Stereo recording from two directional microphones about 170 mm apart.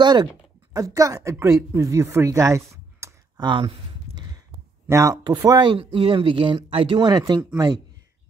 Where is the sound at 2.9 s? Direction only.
20° right (ahead or behind).